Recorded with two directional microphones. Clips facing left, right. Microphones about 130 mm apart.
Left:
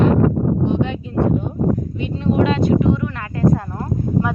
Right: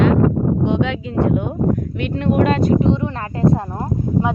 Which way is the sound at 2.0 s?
65° right (ahead or behind).